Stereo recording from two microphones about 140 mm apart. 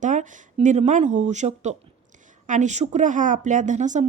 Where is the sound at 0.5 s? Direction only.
55° right (ahead or behind).